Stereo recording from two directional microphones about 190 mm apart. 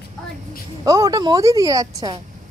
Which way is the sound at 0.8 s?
15° right (ahead or behind).